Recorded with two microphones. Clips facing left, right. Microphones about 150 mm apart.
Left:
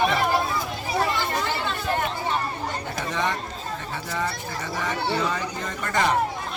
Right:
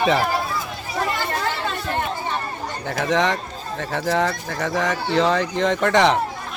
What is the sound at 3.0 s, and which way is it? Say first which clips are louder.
Speech: right 8 dB; 90° right.